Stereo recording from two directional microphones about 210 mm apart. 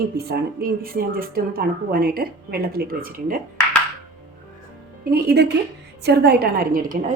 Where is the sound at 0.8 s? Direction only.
45° right (ahead or behind).